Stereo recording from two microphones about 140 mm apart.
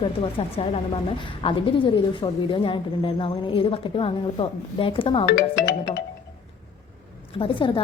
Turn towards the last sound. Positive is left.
turn(degrees=40)  # may be behind; listen again after turning